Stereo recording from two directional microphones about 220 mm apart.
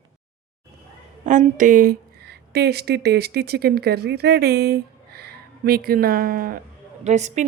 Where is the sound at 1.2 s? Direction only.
35° right (ahead or behind).